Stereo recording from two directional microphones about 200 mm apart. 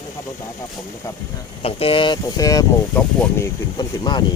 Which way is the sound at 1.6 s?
30° left (ahead or behind).